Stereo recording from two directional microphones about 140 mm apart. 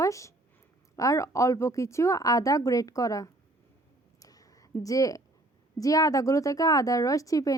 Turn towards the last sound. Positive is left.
turn(degrees=25)  # may be behind; listen again after turning